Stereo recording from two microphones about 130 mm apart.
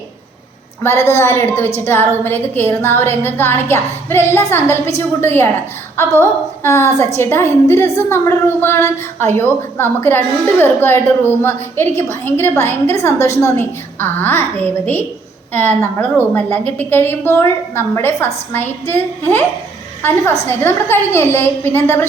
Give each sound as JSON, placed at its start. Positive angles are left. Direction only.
{"t": 0.8, "sound": "a woman's voice", "side_deg": 20}